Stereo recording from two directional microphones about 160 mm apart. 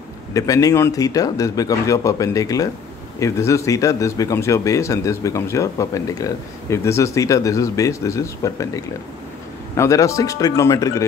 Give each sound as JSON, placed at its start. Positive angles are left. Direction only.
{"t": 0.3, "sound": "speech", "side_deg": 20}